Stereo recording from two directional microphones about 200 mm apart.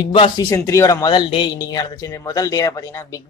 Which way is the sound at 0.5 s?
15° left (ahead or behind).